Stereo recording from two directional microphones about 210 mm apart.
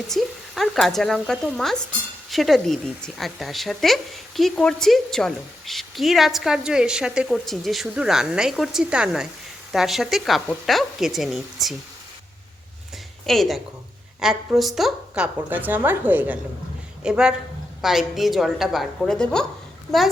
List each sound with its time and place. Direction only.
0.1 s a woman's voice: centre (ahead or behind)
13.2 s a woman's voice: centre (ahead or behind)